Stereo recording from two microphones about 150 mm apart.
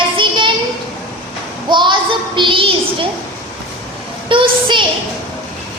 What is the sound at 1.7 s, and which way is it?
Child singing, 30° right (ahead or behind).